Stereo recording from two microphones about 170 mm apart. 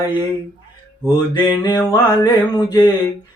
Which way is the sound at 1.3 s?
25° left (ahead or behind).